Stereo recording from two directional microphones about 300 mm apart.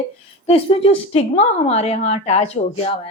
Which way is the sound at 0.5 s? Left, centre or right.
Centre.